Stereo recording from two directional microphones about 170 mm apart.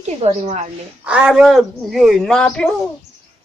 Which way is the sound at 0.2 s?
40° right (ahead or behind).